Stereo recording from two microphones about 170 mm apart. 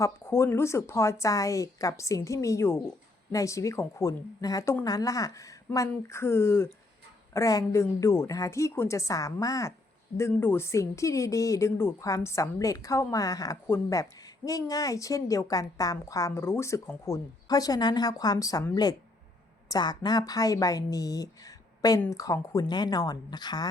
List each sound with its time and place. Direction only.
0.0 s speech: 15° left (ahead or behind)